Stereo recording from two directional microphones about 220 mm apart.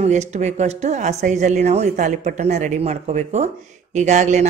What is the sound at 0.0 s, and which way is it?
Speech, 30° right (ahead or behind).